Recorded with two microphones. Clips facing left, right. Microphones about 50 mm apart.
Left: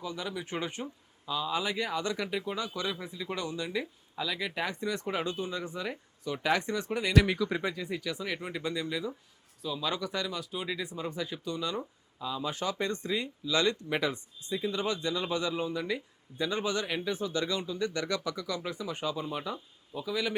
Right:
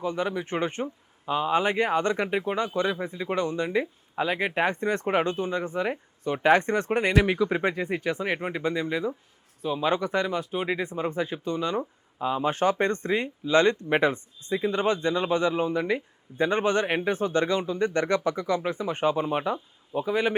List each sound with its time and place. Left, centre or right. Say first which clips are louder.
0.0 s speech: right 9 dB; right
7.1 s speech: right 1 dB; right
7.6 s speech: right 7 dB; right